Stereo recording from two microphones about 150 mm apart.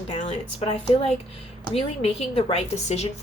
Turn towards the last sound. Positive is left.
turn(degrees=45)  # may be behind; listen again after turning